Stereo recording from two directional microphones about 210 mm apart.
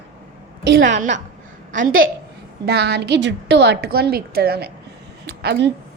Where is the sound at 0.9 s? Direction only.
35° right (ahead or behind).